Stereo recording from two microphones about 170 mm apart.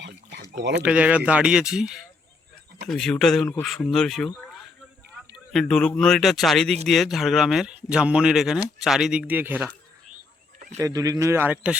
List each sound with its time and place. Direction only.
0.0 s a sound: 85° right
0.5 s speech: 90° right
0.8 s speech: 10° right (ahead or behind)
10.8 s a man's voice: 20° right (ahead or behind)